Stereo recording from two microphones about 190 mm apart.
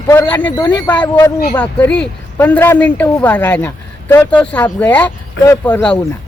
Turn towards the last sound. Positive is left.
turn(degrees=5)  # may be behind; listen again after turning